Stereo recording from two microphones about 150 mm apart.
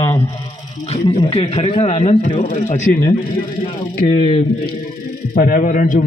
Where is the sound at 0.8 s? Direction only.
40° left (ahead or behind).